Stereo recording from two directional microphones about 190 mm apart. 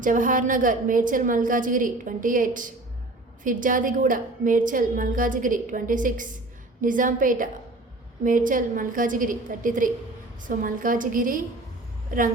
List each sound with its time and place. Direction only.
0.0 s a woman's voice: 45° right (ahead or behind)